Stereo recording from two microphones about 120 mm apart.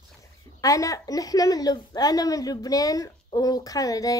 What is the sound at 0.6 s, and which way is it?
A woman's voice, 30° left (ahead or behind).